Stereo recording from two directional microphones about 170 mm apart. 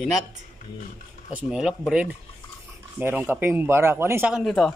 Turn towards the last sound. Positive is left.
turn(degrees=0)  # may be behind; listen again after turning